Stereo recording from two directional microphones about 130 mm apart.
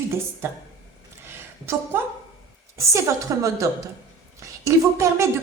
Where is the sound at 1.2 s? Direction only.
20° right (ahead or behind).